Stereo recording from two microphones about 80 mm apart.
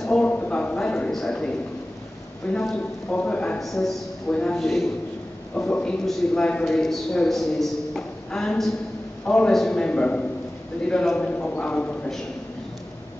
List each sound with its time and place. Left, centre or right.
0.2 s a sound: centre
2.4 s a man's voice: centre
3.5 s a man's voice: centre
4.3 s a man's voice: centre
4.6 s a man's voice: centre
5.7 s a man's voice: centre